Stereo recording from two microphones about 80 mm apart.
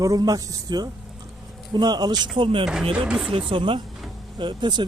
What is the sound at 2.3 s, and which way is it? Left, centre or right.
Speech, right.